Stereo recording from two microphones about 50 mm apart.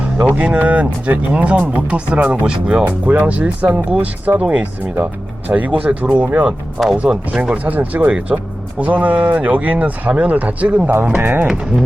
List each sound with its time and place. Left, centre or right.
0.0 s speech: right
2.5 s speech: centre
2.8 s speech: right
6.7 s speech: centre
7.0 s speech: right
11.2 s speech: right